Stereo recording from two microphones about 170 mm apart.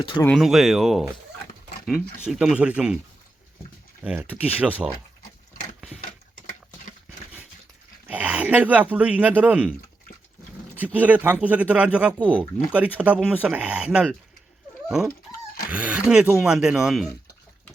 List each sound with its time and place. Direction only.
0.3 s speech: centre (ahead or behind)
4.0 s speech: 10° right (ahead or behind)
6.3 s a sound: 50° left (ahead or behind)
8.0 s speech: 10° right (ahead or behind)
10.8 s speech: 10° right (ahead or behind)